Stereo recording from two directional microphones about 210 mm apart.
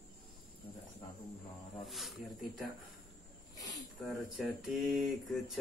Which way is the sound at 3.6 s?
15° left (ahead or behind).